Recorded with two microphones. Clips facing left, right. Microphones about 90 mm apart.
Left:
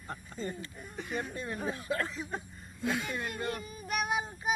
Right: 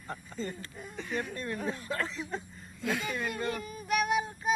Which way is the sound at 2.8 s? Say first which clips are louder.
Even; 20° left (ahead or behind).